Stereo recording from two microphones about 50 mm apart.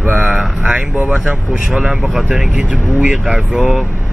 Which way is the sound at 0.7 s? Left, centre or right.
Right.